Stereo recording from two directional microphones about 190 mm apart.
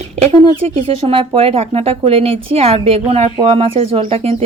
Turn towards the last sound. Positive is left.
turn(degrees=-30)  # may be behind; listen again after turning